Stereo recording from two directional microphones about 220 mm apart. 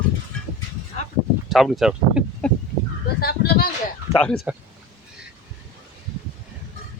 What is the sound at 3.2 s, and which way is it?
Speech, 45° left (ahead or behind).